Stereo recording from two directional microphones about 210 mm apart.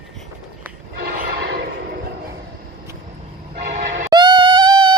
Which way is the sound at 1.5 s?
50° right (ahead or behind).